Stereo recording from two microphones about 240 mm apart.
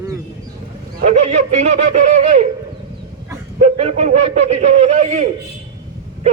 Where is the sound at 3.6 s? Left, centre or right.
Right.